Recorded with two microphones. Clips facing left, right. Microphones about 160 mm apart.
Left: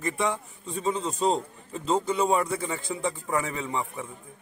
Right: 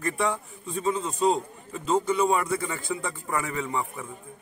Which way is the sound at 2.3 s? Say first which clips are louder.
Even; 25° left (ahead or behind).